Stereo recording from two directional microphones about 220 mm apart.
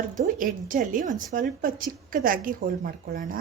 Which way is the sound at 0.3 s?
35° right (ahead or behind).